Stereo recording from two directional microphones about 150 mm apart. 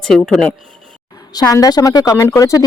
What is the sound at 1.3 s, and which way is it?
Speech, 25° left (ahead or behind).